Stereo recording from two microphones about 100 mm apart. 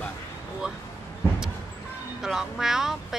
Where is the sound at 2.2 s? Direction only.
5° right (ahead or behind).